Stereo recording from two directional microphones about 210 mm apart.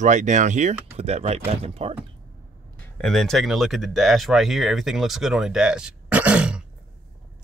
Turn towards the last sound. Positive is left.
turn(degrees=-5)  # may be behind; listen again after turning